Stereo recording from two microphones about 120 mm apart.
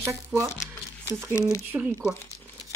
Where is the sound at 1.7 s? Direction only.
20° right (ahead or behind).